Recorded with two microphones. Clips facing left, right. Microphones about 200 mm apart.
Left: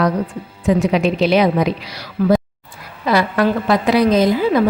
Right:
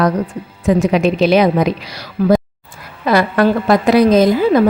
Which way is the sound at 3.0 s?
50° right (ahead or behind).